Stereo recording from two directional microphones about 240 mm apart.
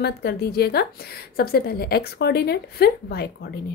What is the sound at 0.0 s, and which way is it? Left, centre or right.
A woman's voice, left.